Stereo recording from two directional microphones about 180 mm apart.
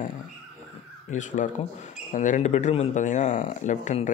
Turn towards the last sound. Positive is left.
turn(degrees=45)  # may be behind; listen again after turning